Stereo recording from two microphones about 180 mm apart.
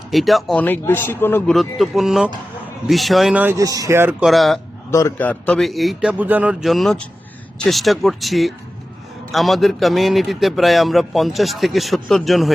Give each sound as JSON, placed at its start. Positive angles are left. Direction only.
{"t": 0.1, "sound": "a man's voice", "side_deg": 0}
{"t": 3.6, "sound": "speech", "side_deg": -20}
{"t": 4.3, "sound": "a man's voice", "side_deg": 0}
{"t": 4.9, "sound": "a man's voice", "side_deg": 15}